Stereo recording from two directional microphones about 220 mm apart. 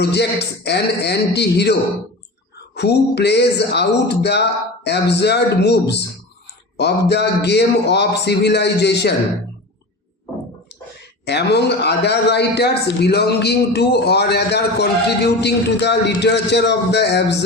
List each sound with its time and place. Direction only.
0.0 s a man's voice: 50° left (ahead or behind)
2.7 s a man's voice: 50° left (ahead or behind)
11.3 s a man's voice: 50° left (ahead or behind)